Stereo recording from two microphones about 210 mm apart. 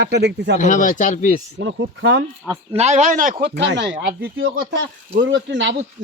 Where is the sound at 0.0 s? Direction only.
55° right (ahead or behind).